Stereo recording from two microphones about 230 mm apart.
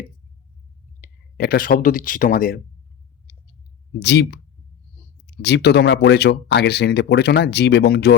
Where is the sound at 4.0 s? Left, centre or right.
Left.